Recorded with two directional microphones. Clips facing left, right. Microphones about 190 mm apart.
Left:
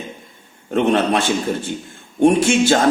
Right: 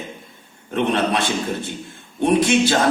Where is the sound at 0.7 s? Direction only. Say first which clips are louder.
Left 4 dB; 45° left (ahead or behind).